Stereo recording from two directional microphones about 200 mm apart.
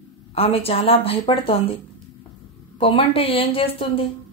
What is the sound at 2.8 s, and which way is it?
A woman's voice, 25° left (ahead or behind).